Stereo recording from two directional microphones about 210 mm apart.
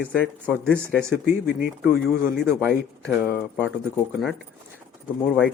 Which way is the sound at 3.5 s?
5° left (ahead or behind).